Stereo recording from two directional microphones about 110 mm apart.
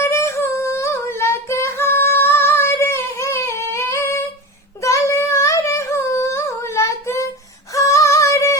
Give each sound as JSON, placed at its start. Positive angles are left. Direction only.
{"t": 0.0, "sound": "humming", "side_deg": 25}
{"t": 4.8, "sound": "a sound", "side_deg": 30}
{"t": 7.7, "sound": "female singing", "side_deg": 30}